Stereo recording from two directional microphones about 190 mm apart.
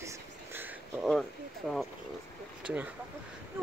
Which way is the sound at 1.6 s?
Centre (ahead or behind).